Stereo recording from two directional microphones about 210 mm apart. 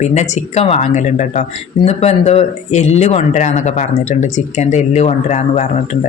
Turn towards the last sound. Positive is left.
turn(degrees=35)  # may be behind; listen again after turning